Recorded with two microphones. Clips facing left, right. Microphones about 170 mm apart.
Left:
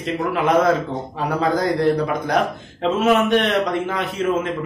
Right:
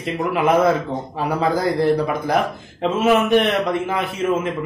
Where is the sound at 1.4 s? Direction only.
5° right (ahead or behind).